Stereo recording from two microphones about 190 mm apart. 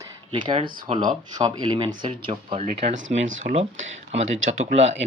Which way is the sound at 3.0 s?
90° right.